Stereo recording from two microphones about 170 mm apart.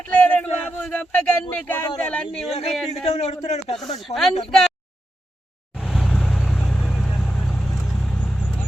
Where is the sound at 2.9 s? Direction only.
35° left (ahead or behind).